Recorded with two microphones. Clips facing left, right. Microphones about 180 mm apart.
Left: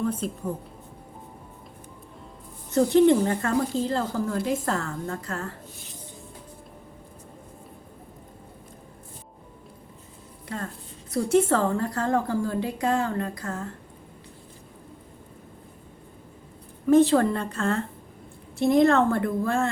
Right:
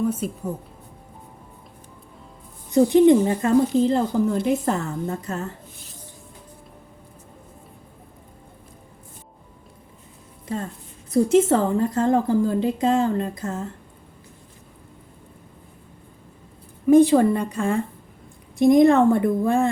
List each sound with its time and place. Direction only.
0.0 s speech: 10° right (ahead or behind)
2.6 s speech: 15° right (ahead or behind)
11.1 s speech: 20° right (ahead or behind)
16.8 s speech: 15° right (ahead or behind)